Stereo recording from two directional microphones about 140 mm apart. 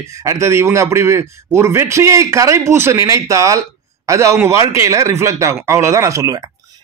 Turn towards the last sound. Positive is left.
turn(degrees=-20)  # may be behind; listen again after turning